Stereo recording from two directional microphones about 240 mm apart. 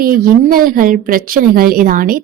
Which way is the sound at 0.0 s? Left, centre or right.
Right.